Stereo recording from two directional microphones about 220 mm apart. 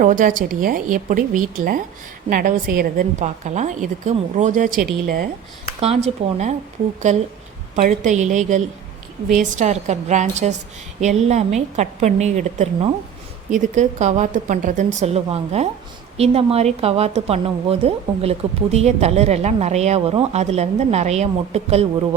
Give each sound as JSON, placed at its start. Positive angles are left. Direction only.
{"t": 0.0, "sound": "a woman's voice", "side_deg": -35}
{"t": 5.8, "sound": "a woman's voice", "side_deg": -30}